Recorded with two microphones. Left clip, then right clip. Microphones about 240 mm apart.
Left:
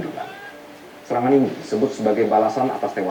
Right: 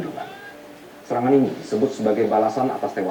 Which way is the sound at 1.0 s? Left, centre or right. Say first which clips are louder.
Left 1 dB; centre.